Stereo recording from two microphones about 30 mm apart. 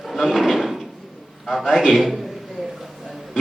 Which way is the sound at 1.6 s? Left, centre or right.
Centre.